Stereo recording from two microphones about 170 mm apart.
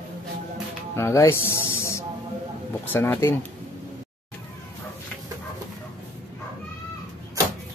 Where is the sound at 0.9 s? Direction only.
15° left (ahead or behind).